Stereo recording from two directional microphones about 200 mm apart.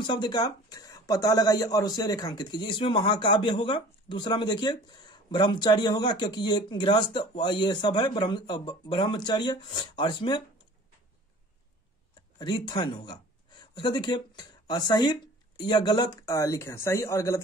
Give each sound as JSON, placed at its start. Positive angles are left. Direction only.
{"t": 0.0, "sound": "speech", "side_deg": 20}
{"t": 12.2, "sound": "speech", "side_deg": 20}